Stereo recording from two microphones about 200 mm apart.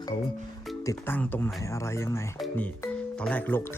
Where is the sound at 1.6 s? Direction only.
15° left (ahead or behind).